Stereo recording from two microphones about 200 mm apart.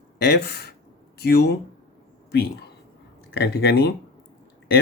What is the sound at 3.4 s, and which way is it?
Speech, 55° left (ahead or behind).